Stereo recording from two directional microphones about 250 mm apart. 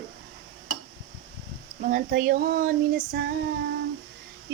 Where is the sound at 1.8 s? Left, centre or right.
Right.